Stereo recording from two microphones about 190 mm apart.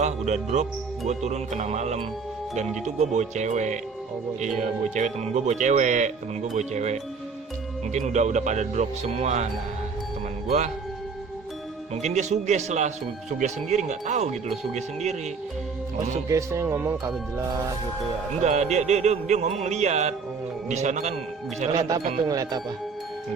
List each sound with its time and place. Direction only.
0.0 s speech: 35° right (ahead or behind)
12.0 s speech: 35° right (ahead or behind)
16.3 s speech: 15° right (ahead or behind)
18.4 s speech: 35° right (ahead or behind)
22.3 s speech: 20° right (ahead or behind)